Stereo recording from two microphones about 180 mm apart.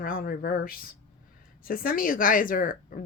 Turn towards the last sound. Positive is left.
turn(degrees=50)  # may be behind; listen again after turning